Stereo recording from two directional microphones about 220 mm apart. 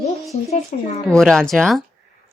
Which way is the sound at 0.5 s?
30° left (ahead or behind).